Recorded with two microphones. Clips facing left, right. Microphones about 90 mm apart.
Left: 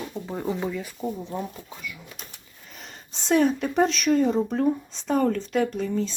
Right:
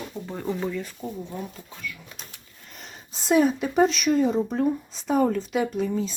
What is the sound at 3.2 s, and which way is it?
Speech, 5° right (ahead or behind).